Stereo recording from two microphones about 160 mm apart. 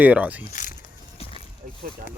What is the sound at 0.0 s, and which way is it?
Speech, 10° right (ahead or behind).